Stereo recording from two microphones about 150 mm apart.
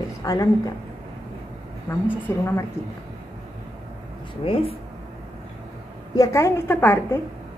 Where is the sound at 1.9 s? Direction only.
15° left (ahead or behind).